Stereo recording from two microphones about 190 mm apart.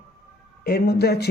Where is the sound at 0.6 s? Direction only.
55° left (ahead or behind).